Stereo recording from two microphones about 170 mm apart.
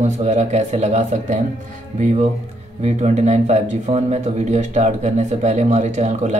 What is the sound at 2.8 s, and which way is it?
Speech, 40° right (ahead or behind).